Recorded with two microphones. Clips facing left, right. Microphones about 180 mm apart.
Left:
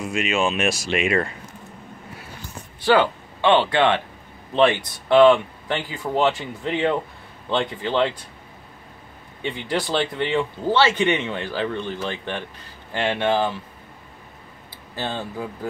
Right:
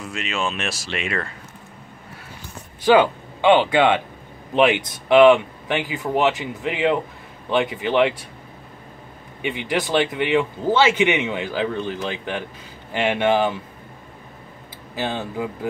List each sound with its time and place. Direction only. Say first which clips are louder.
0.0 s speech: left 4 dB; 15° left (ahead or behind)
2.8 s speech: right 3 dB; 15° right (ahead or behind)
9.4 s speech: right 2 dB; 10° right (ahead or behind)
15.0 s speech: right 3 dB; 10° right (ahead or behind)